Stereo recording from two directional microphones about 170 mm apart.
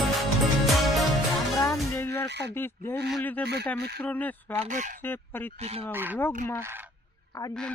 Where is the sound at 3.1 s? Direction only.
10° left (ahead or behind).